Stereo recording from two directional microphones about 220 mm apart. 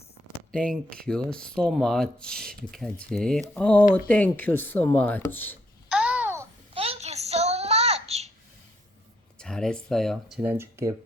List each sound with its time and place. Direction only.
0.5 s speech: 5° left (ahead or behind)
5.9 s babbling: 5° right (ahead or behind)
6.7 s child singing: 25° right (ahead or behind)
9.4 s speech: 5° left (ahead or behind)